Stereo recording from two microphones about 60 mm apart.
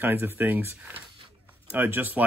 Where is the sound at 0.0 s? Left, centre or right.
Right.